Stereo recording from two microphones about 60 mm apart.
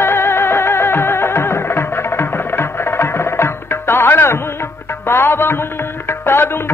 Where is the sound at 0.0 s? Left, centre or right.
Left.